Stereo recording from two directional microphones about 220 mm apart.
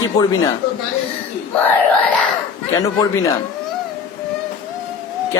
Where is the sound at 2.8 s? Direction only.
15° left (ahead or behind).